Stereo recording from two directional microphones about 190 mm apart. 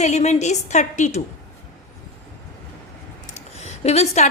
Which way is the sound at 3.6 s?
35° left (ahead or behind).